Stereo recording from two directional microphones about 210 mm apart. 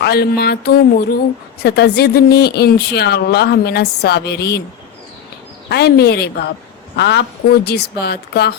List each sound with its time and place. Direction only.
0.0 s speech: 50° left (ahead or behind)
5.6 s speech: 50° left (ahead or behind)